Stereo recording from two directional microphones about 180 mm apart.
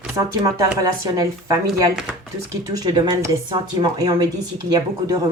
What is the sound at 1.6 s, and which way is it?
Speech, 5° right (ahead or behind).